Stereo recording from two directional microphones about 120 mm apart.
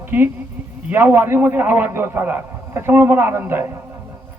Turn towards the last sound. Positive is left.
turn(degrees=-20)  # may be behind; listen again after turning